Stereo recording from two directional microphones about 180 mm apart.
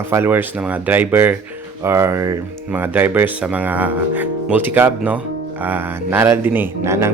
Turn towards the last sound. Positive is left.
turn(degrees=-15)  # may be behind; listen again after turning